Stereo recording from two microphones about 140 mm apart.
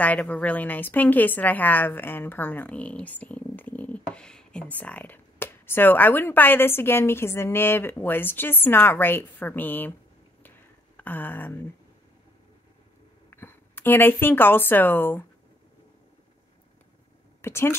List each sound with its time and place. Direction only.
0.0 s a woman's voice: 10° left (ahead or behind)
11.0 s speech: 15° left (ahead or behind)
13.3 s speech: 15° left (ahead or behind)
17.4 s speech: 15° left (ahead or behind)